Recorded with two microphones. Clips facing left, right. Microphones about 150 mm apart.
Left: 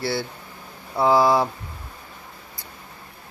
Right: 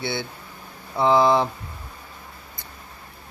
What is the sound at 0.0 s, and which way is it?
Speech, centre (ahead or behind).